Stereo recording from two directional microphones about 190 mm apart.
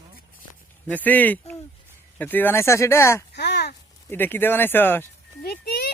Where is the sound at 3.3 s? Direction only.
60° left (ahead or behind).